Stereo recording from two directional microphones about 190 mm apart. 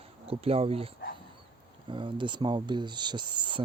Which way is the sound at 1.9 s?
25° right (ahead or behind).